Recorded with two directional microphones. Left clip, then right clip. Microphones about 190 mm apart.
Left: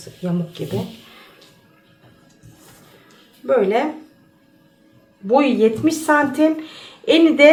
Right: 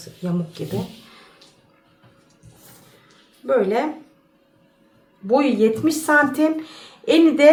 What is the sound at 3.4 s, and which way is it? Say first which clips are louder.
Speech: left 2 dB; centre (ahead or behind).